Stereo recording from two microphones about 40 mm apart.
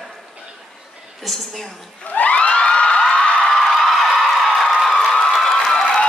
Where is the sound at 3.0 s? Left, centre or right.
Left.